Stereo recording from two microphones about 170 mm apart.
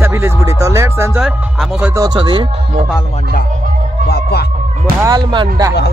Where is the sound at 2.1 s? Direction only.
25° right (ahead or behind).